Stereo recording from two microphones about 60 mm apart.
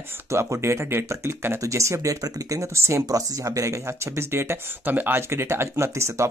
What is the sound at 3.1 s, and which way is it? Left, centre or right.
Speech, right.